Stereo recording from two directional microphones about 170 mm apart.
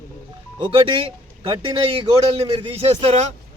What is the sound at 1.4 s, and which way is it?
A man's voice, 30° right (ahead or behind).